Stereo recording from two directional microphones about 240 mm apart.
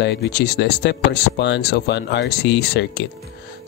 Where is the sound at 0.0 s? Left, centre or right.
Left.